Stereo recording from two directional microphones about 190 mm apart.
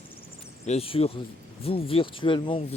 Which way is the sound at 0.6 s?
30° left (ahead or behind).